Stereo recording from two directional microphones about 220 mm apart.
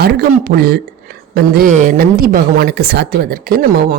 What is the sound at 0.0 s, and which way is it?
A woman's voice, 45° right (ahead or behind).